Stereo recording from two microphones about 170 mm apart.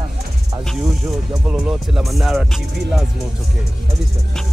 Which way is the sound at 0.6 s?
Centre (ahead or behind).